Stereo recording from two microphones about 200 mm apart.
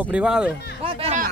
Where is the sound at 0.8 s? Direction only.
30° right (ahead or behind).